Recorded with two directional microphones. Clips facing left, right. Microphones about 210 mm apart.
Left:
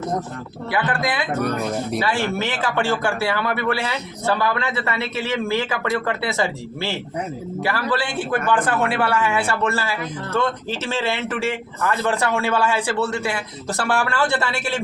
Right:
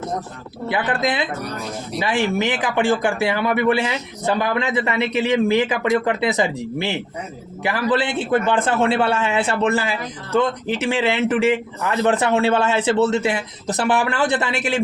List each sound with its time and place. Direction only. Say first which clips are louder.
0.7 s speech: right 2 dB; 20° right (ahead or behind)
1.4 s speech: left 6 dB; 55° left (ahead or behind)
2.0 s speech: right 6 dB; 15° right (ahead or behind)